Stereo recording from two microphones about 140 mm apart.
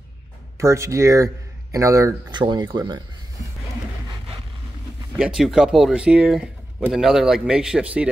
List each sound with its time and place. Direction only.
0.6 s speech: 20° right (ahead or behind)
2.3 s speech: 30° right (ahead or behind)
5.1 s speech: 5° right (ahead or behind)